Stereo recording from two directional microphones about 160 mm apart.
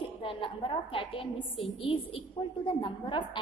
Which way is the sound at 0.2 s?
35° left (ahead or behind).